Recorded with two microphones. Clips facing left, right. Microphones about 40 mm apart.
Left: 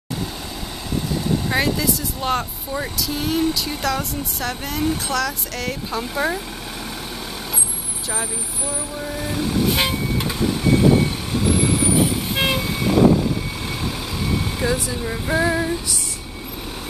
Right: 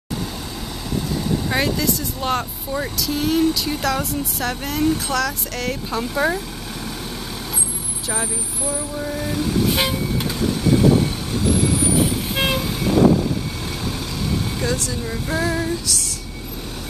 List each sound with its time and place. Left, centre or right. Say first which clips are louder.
1.5 s speech: even; centre
8.7 s speech: right 2 dB; centre
10.2 s vehicle: left 1 dB; centre
14.6 s speech: left 1 dB; centre